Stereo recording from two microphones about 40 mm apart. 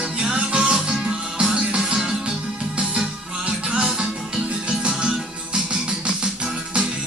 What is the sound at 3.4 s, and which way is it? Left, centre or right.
Music, right.